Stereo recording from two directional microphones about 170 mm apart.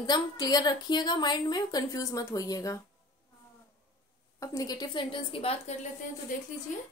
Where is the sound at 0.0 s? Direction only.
25° left (ahead or behind).